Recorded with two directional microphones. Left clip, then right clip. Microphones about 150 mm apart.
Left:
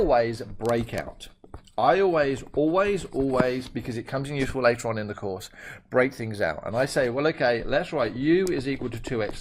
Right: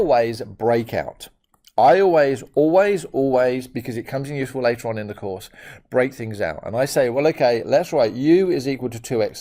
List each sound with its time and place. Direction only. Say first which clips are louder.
0.0 s speech: right 4 dB; 40° right (ahead or behind)